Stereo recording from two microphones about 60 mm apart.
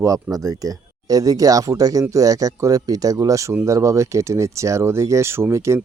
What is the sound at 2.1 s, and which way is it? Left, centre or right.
Speech, right.